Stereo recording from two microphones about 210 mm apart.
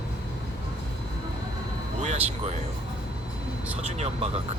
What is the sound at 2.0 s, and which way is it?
Speech, 30° right (ahead or behind).